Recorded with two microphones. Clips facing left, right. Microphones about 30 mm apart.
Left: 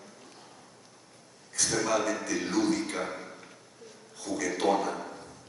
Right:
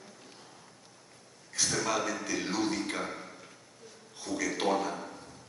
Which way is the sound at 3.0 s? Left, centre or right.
Centre.